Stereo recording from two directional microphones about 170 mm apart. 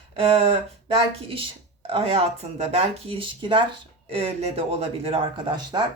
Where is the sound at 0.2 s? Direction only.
35° right (ahead or behind).